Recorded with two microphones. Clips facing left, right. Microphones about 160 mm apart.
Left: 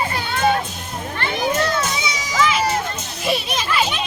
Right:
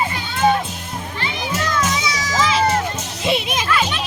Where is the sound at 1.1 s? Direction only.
55° left (ahead or behind).